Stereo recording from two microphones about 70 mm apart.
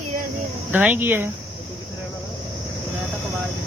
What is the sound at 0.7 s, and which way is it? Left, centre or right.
Speech, right.